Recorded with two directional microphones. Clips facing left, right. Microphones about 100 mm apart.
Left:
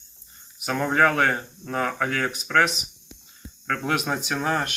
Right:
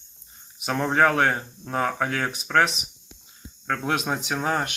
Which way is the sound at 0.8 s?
20° right (ahead or behind).